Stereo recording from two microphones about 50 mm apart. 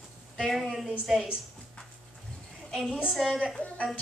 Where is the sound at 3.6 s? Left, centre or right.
Left.